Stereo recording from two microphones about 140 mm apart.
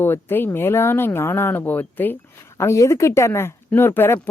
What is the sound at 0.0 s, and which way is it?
Speech, 15° left (ahead or behind).